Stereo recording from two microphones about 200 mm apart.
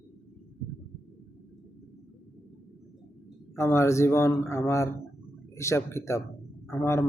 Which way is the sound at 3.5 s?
15° left (ahead or behind).